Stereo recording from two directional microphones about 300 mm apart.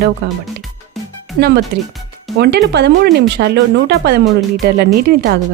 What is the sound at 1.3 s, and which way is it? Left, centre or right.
A woman's voice, right.